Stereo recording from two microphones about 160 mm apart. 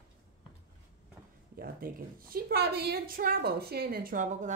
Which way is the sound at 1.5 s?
65° right (ahead or behind).